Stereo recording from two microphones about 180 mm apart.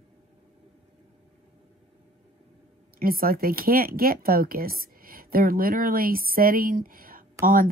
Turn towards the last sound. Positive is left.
turn(degrees=-55)  # may be behind; listen again after turning